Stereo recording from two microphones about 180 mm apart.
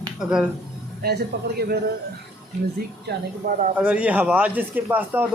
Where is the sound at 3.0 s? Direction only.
50° right (ahead or behind).